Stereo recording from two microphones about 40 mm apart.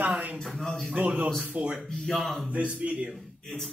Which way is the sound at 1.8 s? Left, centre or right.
Centre.